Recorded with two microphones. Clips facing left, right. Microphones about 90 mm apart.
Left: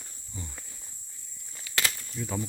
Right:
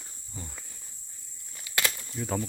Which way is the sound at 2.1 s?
50° right (ahead or behind).